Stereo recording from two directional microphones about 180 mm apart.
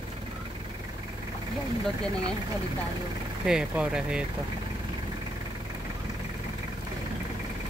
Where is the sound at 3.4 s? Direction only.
5° right (ahead or behind).